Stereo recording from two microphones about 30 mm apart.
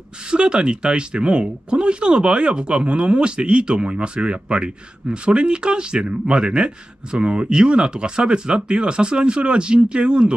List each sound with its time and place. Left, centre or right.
0.2 s speech: right